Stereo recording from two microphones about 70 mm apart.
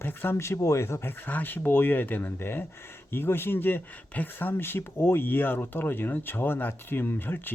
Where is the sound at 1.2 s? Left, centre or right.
Left.